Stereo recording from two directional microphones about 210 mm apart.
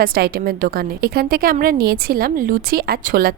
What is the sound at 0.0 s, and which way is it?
A woman's voice, 45° right (ahead or behind).